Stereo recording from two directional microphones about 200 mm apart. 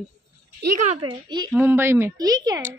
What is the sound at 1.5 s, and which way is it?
Speech, 10° right (ahead or behind).